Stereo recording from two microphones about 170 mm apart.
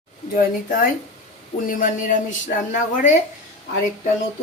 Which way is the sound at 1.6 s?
50° left (ahead or behind).